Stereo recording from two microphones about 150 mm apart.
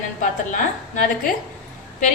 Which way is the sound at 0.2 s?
65° left (ahead or behind).